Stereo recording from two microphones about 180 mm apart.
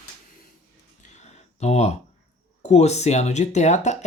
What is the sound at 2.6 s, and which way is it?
Speech, 40° left (ahead or behind).